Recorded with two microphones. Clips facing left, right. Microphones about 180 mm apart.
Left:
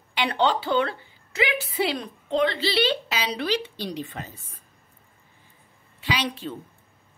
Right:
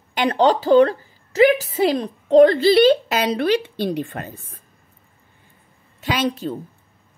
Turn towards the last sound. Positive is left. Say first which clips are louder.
# right 6 dB
turn(degrees=-40)  # may be behind; listen again after turning